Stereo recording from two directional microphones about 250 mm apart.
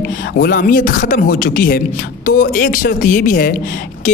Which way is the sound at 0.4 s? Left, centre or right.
Left.